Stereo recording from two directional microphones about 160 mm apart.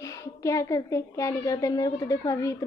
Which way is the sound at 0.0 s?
20° left (ahead or behind).